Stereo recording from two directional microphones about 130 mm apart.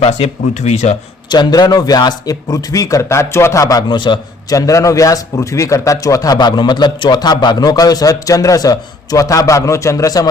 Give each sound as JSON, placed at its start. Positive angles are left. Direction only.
{"t": 0.0, "sound": "speech", "side_deg": 55}
{"t": 1.3, "sound": "speech", "side_deg": 30}